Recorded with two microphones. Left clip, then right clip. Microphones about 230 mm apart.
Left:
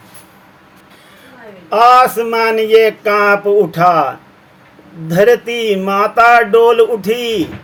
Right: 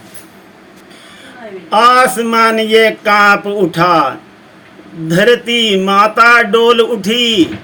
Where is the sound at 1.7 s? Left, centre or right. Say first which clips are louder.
Even; left.